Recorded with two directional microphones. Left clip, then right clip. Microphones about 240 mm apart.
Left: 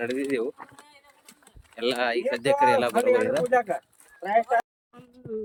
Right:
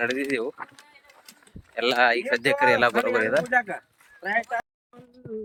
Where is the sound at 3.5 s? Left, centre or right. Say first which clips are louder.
Left 1 dB; left.